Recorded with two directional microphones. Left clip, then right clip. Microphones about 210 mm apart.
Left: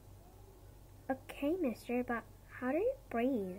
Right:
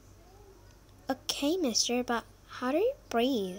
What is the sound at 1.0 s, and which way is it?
A woman's voice, 35° right (ahead or behind).